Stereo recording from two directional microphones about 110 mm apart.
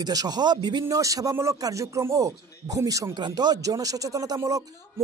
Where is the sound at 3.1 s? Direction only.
40° right (ahead or behind).